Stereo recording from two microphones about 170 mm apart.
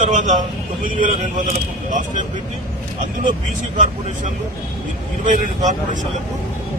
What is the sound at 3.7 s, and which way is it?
A man's voice, 45° right (ahead or behind).